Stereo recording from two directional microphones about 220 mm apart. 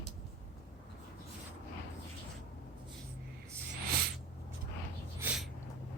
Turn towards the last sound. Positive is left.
turn(degrees=-5)  # may be behind; listen again after turning